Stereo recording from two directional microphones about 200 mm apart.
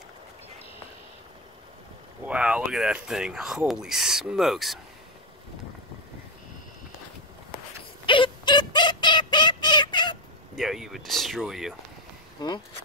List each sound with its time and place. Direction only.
2.2 s speech: 5° right (ahead or behind)
8.1 s a sound: 25° left (ahead or behind)
10.5 s speech: centre (ahead or behind)
12.4 s speech: 20° left (ahead or behind)